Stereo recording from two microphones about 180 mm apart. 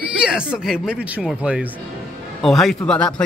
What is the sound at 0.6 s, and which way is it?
Speech, 5° right (ahead or behind).